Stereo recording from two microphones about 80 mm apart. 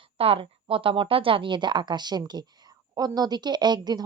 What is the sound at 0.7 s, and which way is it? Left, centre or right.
A woman's voice, right.